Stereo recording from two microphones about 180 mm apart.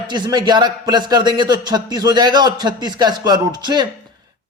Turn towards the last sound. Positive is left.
turn(degrees=-25)  # may be behind; listen again after turning